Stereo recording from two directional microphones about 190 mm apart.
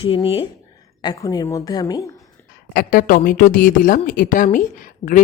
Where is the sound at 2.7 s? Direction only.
50° left (ahead or behind).